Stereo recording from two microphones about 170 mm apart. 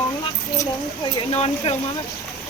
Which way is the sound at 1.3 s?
35° left (ahead or behind).